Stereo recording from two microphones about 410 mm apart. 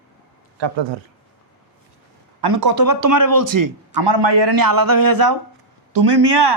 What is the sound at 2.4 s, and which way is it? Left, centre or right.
Speech, right.